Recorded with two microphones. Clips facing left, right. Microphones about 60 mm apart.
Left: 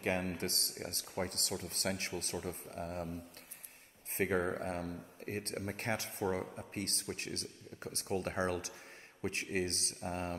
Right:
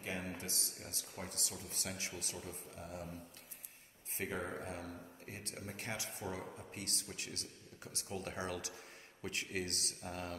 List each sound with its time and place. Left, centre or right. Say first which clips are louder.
0.0 s speech: left 8 dB; left
4.2 s speech: left 8 dB; left
6.4 s speech: left 4 dB; centre
6.7 s speech: left 6 dB; left